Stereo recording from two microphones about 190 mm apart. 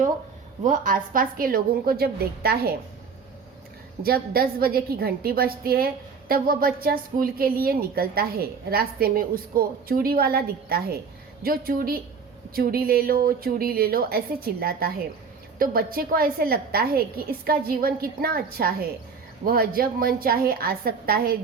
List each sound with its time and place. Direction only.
0.6 s a woman's voice: 45° right (ahead or behind)
4.0 s a woman's voice: 50° right (ahead or behind)